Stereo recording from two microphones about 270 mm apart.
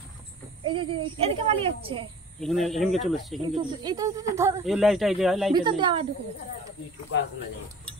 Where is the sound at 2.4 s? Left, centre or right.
Centre.